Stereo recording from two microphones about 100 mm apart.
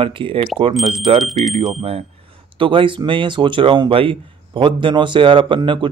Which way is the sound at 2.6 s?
60° right (ahead or behind).